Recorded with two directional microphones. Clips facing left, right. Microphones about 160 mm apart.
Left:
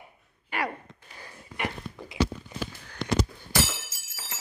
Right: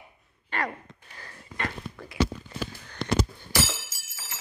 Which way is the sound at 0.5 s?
10° left (ahead or behind).